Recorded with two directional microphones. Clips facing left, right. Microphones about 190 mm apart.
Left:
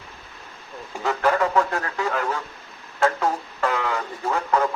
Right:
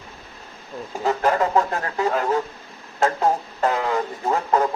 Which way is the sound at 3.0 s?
40° right (ahead or behind).